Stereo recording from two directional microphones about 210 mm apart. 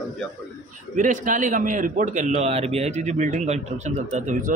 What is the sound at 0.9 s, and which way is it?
A man's voice, 40° right (ahead or behind).